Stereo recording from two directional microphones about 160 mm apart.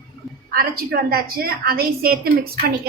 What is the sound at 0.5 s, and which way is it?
A woman's voice, 75° right (ahead or behind).